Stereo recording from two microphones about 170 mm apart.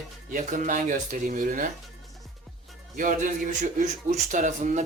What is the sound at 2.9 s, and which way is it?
Speech, 50° right (ahead or behind).